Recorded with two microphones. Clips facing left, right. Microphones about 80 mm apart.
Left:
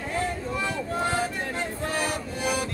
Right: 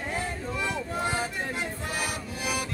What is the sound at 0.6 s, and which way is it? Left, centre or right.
Vehicle, centre.